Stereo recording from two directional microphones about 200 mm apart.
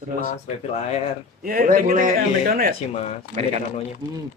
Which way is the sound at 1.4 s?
45° right (ahead or behind).